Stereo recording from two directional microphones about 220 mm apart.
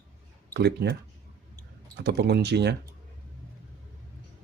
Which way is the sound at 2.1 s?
50° right (ahead or behind).